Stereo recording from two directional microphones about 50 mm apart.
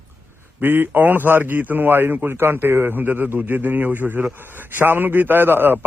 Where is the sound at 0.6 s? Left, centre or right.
Right.